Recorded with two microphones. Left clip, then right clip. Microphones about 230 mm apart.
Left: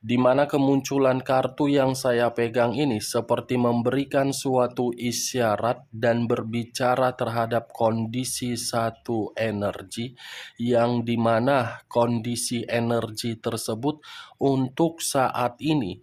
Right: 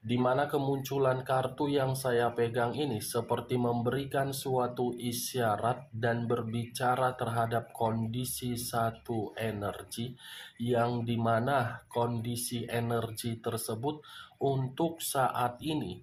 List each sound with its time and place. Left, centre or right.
0.1 s speech: left